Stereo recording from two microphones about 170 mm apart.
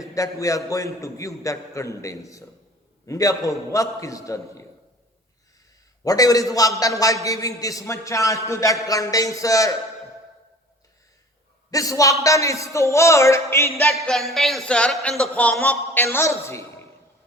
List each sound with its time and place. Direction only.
0.0 s a man's voice: 20° left (ahead or behind)
6.1 s a man's voice: 20° left (ahead or behind)
11.7 s a man's voice: 20° left (ahead or behind)
13.9 s speech: centre (ahead or behind)